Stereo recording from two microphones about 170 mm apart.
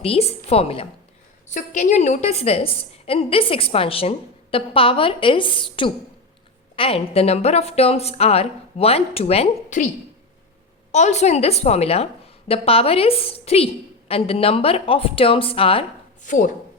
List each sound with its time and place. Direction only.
0.0 s a woman's voice: 35° left (ahead or behind)
10.9 s a woman's voice: 40° left (ahead or behind)
16.2 s speech: 50° left (ahead or behind)